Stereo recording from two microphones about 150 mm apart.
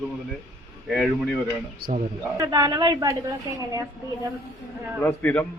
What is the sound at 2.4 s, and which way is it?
A woman's voice, 25° right (ahead or behind).